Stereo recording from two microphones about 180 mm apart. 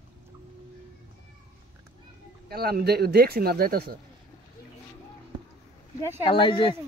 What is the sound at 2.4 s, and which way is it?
Speech, 60° right (ahead or behind).